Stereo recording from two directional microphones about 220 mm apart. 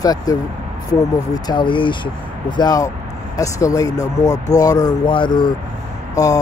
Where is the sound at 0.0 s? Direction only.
15° left (ahead or behind).